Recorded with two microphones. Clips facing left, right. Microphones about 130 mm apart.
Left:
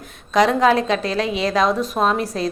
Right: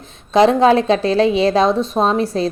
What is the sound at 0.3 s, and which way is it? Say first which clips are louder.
A woman's voice: right 4 dB; 30° right (ahead or behind).